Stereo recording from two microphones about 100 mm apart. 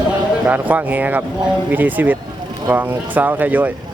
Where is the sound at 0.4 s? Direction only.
15° right (ahead or behind).